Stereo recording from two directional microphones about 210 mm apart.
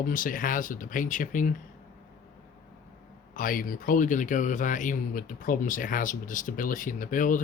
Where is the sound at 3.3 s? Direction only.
40° left (ahead or behind).